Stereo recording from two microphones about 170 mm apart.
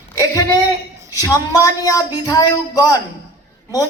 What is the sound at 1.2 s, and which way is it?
A woman's voice, 20° left (ahead or behind).